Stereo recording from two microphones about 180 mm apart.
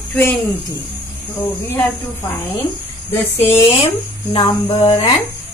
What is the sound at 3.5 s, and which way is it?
Speech, 30° left (ahead or behind).